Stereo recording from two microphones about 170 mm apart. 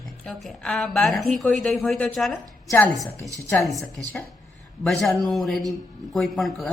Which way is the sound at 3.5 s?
Centre (ahead or behind).